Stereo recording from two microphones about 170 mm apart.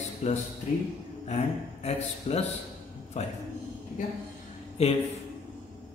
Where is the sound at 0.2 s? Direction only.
40° left (ahead or behind).